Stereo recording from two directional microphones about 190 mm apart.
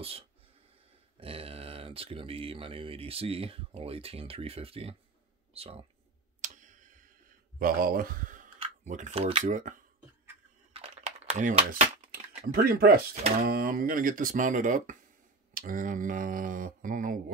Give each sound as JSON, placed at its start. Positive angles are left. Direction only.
{"t": 1.2, "sound": "speech", "side_deg": -30}
{"t": 6.4, "sound": "tick", "side_deg": -40}
{"t": 7.5, "sound": "speech", "side_deg": -50}
{"t": 10.7, "sound": "crumpling", "side_deg": -30}
{"t": 12.5, "sound": "speech", "side_deg": -55}